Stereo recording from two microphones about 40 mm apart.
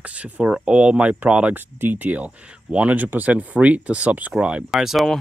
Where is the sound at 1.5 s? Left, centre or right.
Right.